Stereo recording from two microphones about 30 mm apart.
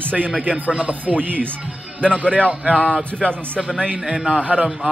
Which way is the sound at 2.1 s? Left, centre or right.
Right.